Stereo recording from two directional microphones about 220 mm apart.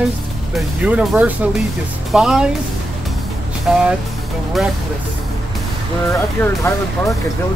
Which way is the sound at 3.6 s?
5° right (ahead or behind).